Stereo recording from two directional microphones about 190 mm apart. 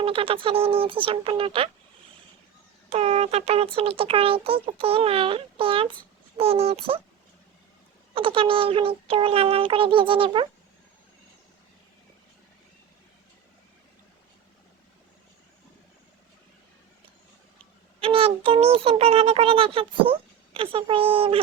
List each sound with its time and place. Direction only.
0.0 s a child's voice: 30° right (ahead or behind)
2.9 s a child's voice: 35° right (ahead or behind)
8.1 s a child's voice: 30° right (ahead or behind)
18.0 s a child's voice: 30° right (ahead or behind)